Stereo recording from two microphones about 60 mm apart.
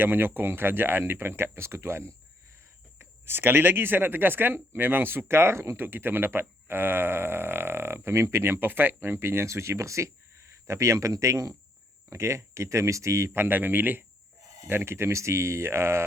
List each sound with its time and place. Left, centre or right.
0.0 s speech: right
5.8 s speech: right
13.3 s speech: right